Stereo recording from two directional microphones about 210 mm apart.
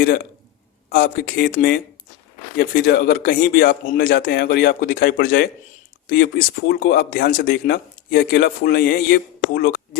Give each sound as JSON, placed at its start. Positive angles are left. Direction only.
{"t": 0.9, "sound": "speech", "side_deg": 45}